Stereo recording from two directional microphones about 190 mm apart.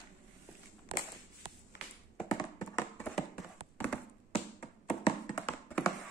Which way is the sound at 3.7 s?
10° left (ahead or behind).